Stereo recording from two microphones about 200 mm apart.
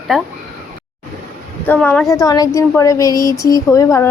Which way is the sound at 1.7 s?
5° left (ahead or behind).